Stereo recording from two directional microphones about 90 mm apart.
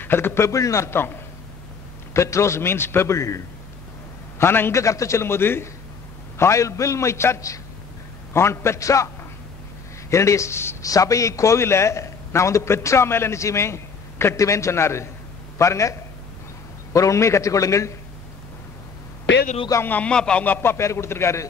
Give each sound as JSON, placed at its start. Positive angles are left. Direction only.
{"t": 0.0, "sound": "a man's voice", "side_deg": 25}
{"t": 2.1, "sound": "a man's voice", "side_deg": 35}
{"t": 19.9, "sound": "a man's voice", "side_deg": 15}